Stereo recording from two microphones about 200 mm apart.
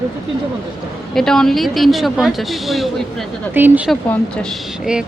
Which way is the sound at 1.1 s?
Centre (ahead or behind).